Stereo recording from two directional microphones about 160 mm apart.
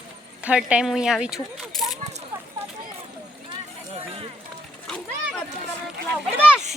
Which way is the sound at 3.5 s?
35° right (ahead or behind).